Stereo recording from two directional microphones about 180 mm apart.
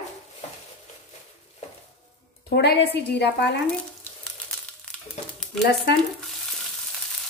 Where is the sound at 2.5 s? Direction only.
70° left (ahead or behind).